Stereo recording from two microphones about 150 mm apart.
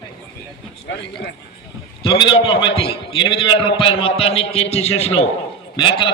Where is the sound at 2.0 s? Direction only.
35° left (ahead or behind).